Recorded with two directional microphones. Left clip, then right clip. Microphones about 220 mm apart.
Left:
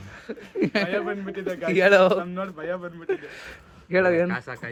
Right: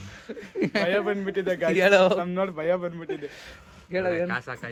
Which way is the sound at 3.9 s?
15° left (ahead or behind).